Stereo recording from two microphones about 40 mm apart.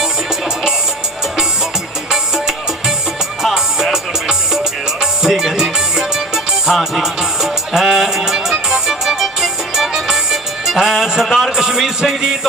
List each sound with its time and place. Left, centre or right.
0.0 s music: centre
2.0 s music: centre